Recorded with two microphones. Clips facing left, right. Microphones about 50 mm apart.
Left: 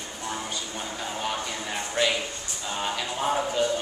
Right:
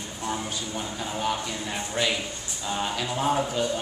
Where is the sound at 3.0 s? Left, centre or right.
Centre.